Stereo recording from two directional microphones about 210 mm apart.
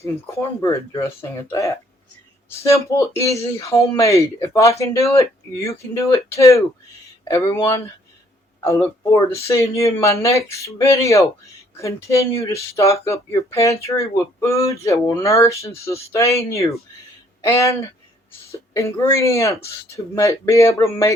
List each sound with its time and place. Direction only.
0.0 s speech: 15° left (ahead or behind)